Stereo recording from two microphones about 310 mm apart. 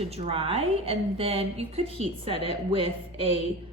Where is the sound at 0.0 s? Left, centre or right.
Centre.